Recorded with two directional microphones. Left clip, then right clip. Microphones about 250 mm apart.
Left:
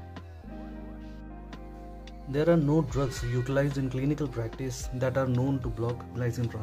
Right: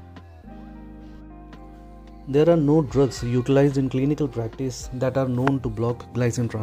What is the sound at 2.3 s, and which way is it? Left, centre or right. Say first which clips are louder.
Speech: right 7 dB; right.